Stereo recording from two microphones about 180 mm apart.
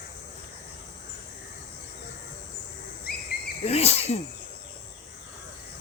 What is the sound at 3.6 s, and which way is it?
Speech, 35° left (ahead or behind).